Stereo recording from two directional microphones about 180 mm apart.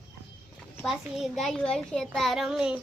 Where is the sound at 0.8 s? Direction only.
Centre (ahead or behind).